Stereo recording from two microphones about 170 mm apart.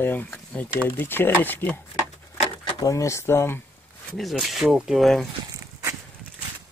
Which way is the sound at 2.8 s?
20° left (ahead or behind).